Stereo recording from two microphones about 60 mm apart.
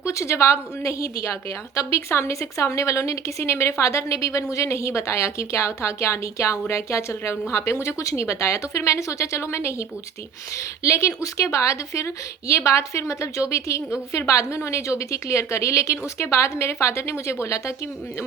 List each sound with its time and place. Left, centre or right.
0.0 s a woman's voice: left
10.8 s a woman's voice: left